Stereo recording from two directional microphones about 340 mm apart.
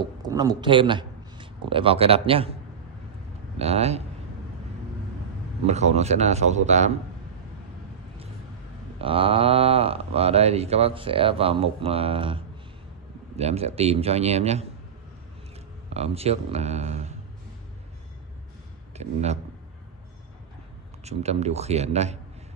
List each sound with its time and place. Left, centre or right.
0.0 s a man's voice: centre
3.5 s speech: centre
5.7 s a man's voice: centre
8.9 s speech: centre
15.9 s a man's voice: centre
18.9 s a sound: centre
21.0 s a man's voice: centre